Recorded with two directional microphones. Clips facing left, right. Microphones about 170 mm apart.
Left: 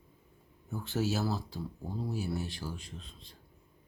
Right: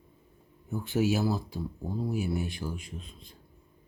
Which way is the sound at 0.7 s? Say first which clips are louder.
Right 5 dB; 15° right (ahead or behind).